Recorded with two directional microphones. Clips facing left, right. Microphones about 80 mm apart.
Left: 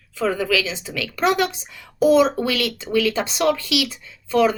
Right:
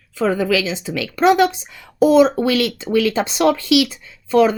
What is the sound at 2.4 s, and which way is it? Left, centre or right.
Speech, right.